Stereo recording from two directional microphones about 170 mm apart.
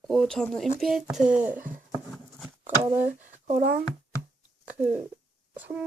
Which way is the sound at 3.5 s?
60° right (ahead or behind).